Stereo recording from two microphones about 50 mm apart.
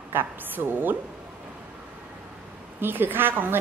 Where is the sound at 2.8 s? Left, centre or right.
Right.